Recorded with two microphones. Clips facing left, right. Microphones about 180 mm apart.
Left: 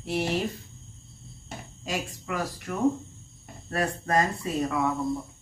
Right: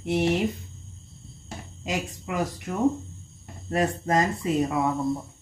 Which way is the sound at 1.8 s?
20° right (ahead or behind).